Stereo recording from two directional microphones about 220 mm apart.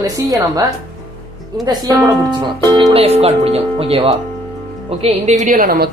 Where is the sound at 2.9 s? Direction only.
25° right (ahead or behind).